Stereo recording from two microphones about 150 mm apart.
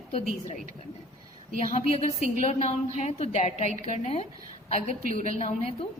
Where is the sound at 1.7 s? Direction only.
45° left (ahead or behind).